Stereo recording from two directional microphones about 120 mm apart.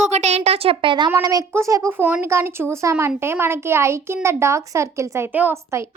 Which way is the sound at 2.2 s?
20° right (ahead or behind).